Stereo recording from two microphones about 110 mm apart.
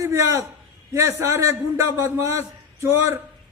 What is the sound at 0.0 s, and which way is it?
A man's voice, 25° right (ahead or behind).